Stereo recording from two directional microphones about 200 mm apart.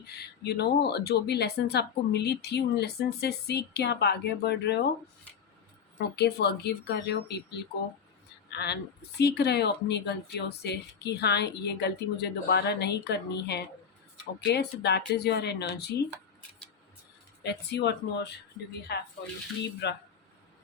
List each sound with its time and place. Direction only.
0.1 s speech: 55° left (ahead or behind)
6.1 s speech: 55° left (ahead or behind)
17.4 s speech: 60° left (ahead or behind)